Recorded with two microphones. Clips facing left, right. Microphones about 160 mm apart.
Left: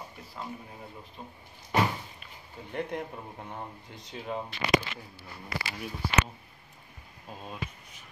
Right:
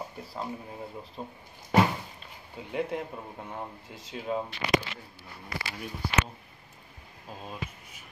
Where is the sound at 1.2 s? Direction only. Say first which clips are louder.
Right 6 dB; 35° right (ahead or behind).